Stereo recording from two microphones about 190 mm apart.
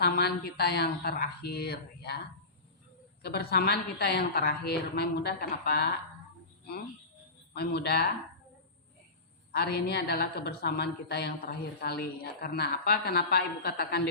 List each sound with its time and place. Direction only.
0.0 s a woman's voice: 55° left (ahead or behind)
3.2 s a woman's voice: 60° left (ahead or behind)
7.5 s a woman's voice: 60° left (ahead or behind)
9.5 s a woman's voice: 55° left (ahead or behind)